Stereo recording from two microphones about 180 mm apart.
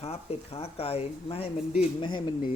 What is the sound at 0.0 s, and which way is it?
A man's voice, 35° left (ahead or behind).